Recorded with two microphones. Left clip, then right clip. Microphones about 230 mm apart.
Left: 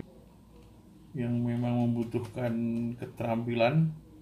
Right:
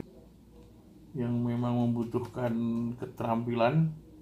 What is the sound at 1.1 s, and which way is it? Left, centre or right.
Speech, centre.